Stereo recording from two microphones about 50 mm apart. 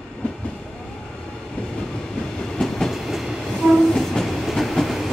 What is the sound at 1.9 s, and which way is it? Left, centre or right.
Train, centre.